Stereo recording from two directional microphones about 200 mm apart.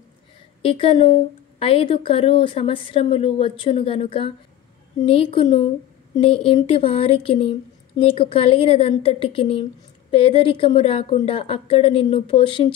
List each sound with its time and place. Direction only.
0.6 s speech: 25° left (ahead or behind)